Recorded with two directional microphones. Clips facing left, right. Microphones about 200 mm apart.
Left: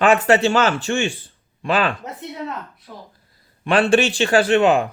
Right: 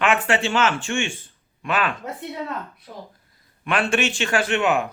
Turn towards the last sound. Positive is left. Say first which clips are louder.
# left 6 dB
turn(degrees=35)  # may be behind; listen again after turning